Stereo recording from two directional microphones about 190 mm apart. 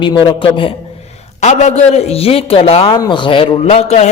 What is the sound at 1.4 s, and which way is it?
A man's voice, 35° left (ahead or behind).